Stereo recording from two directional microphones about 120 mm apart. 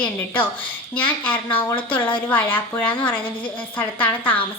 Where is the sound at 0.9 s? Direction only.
15° left (ahead or behind).